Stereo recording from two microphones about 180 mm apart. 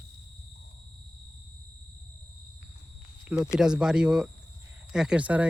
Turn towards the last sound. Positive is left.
turn(degrees=-10)  # may be behind; listen again after turning